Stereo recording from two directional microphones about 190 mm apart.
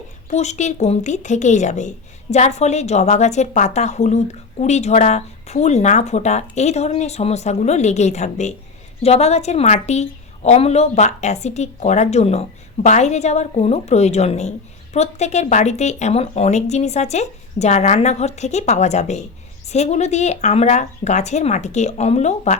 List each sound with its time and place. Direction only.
0.3 s a woman's voice: 35° left (ahead or behind)